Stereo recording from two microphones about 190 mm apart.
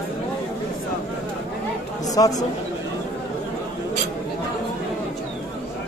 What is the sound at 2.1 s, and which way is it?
Speech, 20° left (ahead or behind).